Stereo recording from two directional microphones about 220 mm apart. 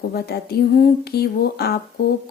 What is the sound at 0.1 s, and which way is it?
A woman's voice, 45° left (ahead or behind).